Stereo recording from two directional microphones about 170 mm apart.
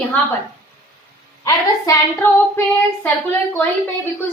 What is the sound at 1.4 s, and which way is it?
A woman's voice, 15° left (ahead or behind).